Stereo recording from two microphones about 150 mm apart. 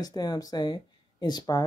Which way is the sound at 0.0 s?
25° left (ahead or behind).